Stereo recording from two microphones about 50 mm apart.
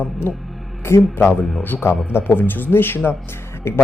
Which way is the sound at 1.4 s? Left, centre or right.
Centre.